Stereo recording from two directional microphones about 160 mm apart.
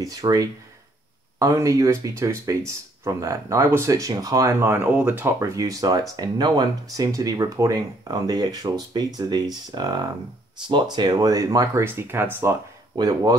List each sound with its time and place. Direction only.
0.0 s speech: 20° right (ahead or behind)
12.9 s speech: 25° right (ahead or behind)